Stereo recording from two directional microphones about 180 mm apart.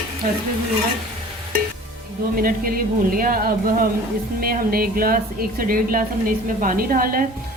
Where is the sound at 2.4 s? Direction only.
55° right (ahead or behind).